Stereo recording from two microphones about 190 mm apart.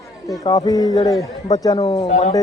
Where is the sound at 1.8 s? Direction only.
30° left (ahead or behind).